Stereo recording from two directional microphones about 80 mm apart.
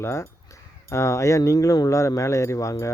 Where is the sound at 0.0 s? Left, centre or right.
Left.